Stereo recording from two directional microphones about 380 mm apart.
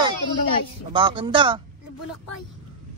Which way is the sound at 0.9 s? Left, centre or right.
Centre.